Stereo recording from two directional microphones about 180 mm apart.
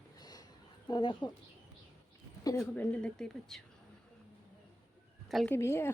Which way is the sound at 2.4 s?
15° left (ahead or behind).